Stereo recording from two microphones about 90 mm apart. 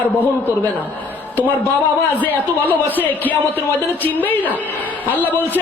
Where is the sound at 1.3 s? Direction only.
20° left (ahead or behind).